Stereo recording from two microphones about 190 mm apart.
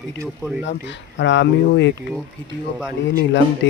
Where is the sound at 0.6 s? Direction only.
70° left (ahead or behind).